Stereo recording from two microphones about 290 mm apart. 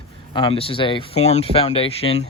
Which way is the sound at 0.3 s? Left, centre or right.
Centre.